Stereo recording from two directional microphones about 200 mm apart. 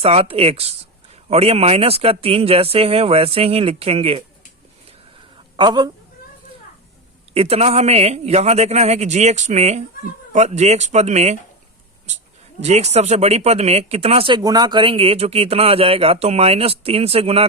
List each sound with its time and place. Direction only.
0.0 s speech: 30° right (ahead or behind)
5.5 s speech: 20° right (ahead or behind)
7.3 s a man's voice: 30° right (ahead or behind)